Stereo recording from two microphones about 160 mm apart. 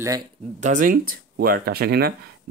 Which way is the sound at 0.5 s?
50° right (ahead or behind).